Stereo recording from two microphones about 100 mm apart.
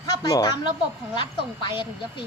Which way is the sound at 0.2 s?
40° left (ahead or behind).